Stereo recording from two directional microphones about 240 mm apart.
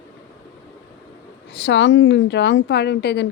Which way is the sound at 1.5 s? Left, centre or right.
Left.